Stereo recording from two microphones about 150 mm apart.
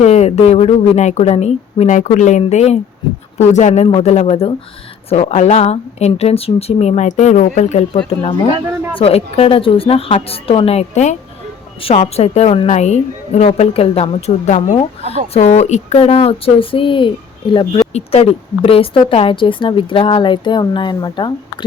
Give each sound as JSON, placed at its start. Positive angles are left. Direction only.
{"t": 0.0, "sound": "a woman's voice", "side_deg": 45}
{"t": 15.0, "sound": "speech", "side_deg": -45}
{"t": 15.3, "sound": "a woman's voice", "side_deg": 50}
{"t": 17.9, "sound": "a woman's voice", "side_deg": 45}